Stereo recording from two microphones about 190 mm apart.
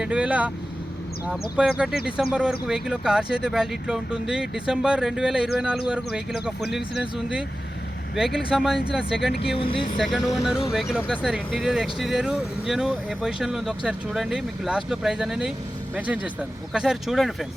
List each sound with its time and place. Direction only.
0.0 s speech: 5° right (ahead or behind)
8.5 s speech: 5° right (ahead or behind)
9.6 s speech: 25° left (ahead or behind)
10.0 s speech: centre (ahead or behind)